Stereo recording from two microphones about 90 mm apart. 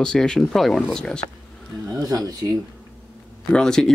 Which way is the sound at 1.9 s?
40° right (ahead or behind).